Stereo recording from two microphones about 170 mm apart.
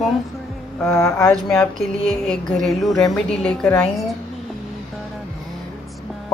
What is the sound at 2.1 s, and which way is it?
Speech, 5° left (ahead or behind).